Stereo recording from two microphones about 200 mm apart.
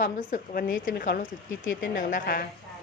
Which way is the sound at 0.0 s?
40° left (ahead or behind).